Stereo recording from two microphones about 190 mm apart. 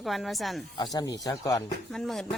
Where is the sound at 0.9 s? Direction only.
20° left (ahead or behind).